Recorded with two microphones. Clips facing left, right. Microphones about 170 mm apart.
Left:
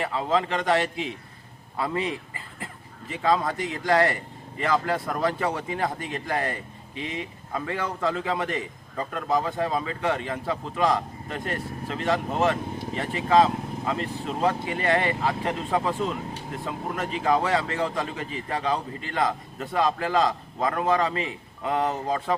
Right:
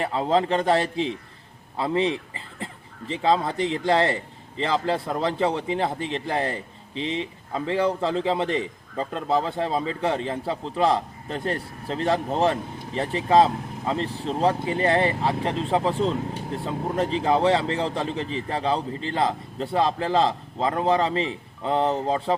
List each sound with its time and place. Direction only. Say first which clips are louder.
0.0 s a man's voice: right 3 dB; 35° right (ahead or behind)